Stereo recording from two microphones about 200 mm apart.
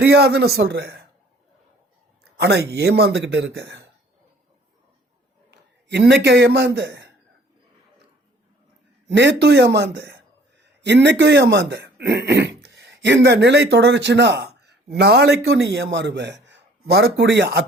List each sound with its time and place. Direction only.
0.0 s a man's voice: 55° right (ahead or behind)
2.3 s a man's voice: 55° right (ahead or behind)
5.5 s a man's voice: 60° right (ahead or behind)
9.0 s a man's voice: 60° right (ahead or behind)